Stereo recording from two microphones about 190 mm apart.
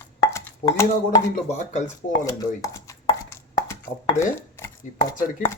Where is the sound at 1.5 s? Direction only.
40° left (ahead or behind).